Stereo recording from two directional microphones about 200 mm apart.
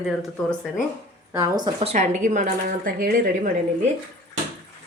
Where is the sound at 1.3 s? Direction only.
20° right (ahead or behind).